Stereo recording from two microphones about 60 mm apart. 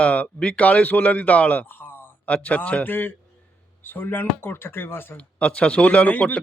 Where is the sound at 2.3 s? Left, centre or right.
Left.